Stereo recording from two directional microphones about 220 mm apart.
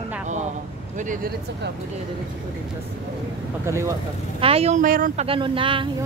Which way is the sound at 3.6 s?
10° right (ahead or behind).